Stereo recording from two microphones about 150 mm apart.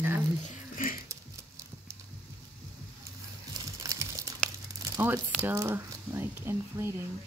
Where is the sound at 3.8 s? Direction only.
20° right (ahead or behind).